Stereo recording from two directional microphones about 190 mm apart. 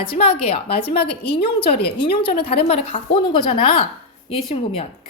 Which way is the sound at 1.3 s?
30° left (ahead or behind).